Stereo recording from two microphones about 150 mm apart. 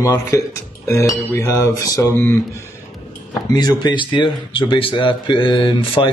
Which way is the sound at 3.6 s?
30° left (ahead or behind).